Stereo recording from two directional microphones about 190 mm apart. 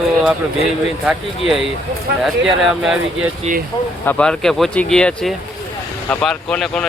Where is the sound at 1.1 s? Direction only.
Centre (ahead or behind).